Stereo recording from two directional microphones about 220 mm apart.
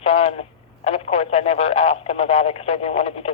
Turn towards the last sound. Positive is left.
turn(degrees=30)  # may be behind; listen again after turning